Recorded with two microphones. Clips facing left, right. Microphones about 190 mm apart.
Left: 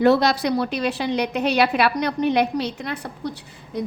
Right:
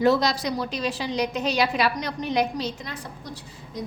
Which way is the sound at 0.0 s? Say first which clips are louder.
Left 4 dB; 60° left (ahead or behind).